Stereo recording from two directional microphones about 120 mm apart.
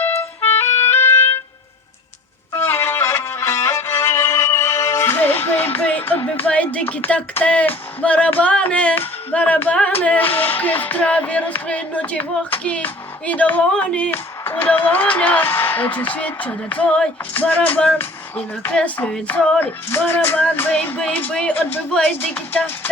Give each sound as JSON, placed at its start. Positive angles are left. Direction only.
{"t": 0.6, "sound": "music", "side_deg": 20}
{"t": 2.6, "sound": "music", "side_deg": 20}